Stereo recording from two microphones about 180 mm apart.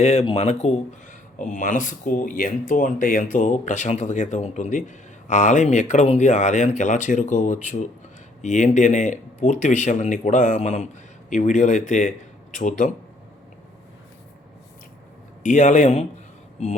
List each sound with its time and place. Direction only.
0.0 s speech: 35° left (ahead or behind)
15.4 s speech: 40° left (ahead or behind)